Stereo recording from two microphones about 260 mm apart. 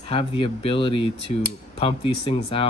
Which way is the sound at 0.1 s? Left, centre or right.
Left.